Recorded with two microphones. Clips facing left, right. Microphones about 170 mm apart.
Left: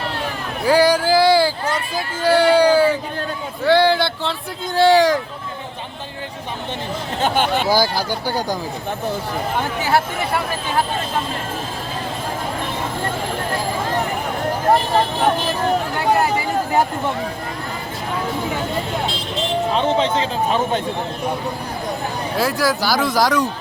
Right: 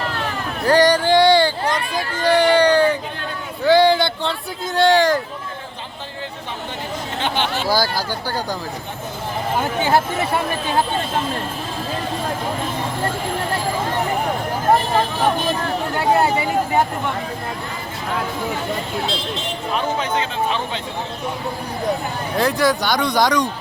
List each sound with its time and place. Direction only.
0.6 s a sound: 10° left (ahead or behind)
2.2 s speech: 10° left (ahead or behind)
7.2 s speech: 45° left (ahead or behind)
7.7 s speech: 15° left (ahead or behind)
9.8 s speech: 20° right (ahead or behind)
19.7 s speech: 30° left (ahead or behind)
20.5 s speech: 45° left (ahead or behind)
22.4 s speech: centre (ahead or behind)